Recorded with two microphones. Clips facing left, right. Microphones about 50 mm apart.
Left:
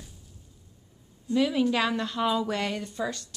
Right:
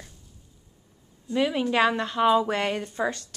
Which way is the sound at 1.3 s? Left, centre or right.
Right.